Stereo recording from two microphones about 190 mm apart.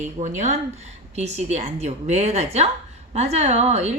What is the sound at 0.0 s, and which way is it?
A woman's voice, 40° right (ahead or behind).